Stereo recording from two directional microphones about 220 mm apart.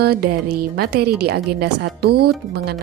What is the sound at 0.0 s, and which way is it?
Music, 45° right (ahead or behind).